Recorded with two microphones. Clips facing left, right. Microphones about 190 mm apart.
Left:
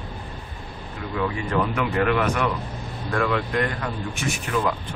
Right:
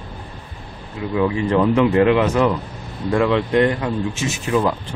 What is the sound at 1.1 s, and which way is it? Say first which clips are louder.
Speech: right 7 dB; 25° right (ahead or behind).